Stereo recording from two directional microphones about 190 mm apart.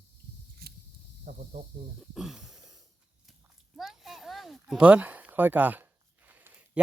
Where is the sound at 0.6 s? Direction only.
55° right (ahead or behind).